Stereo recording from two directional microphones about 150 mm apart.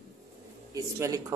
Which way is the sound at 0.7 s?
20° right (ahead or behind).